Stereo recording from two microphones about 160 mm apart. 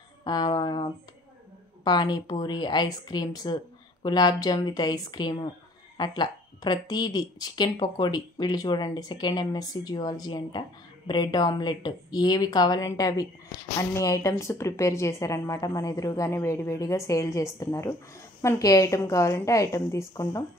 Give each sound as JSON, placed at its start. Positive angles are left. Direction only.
{"t": 0.2, "sound": "speech", "side_deg": 25}